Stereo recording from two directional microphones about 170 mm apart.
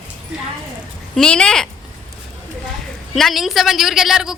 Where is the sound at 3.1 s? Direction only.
Centre (ahead or behind).